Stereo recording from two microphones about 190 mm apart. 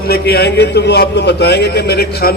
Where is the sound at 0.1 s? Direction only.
55° left (ahead or behind).